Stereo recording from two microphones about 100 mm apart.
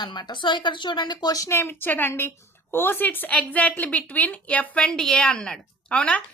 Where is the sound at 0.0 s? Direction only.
50° left (ahead or behind).